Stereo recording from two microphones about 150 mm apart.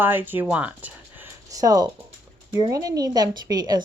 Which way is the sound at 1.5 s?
25° right (ahead or behind).